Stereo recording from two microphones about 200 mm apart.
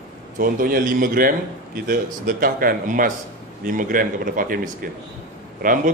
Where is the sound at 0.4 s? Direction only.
45° right (ahead or behind).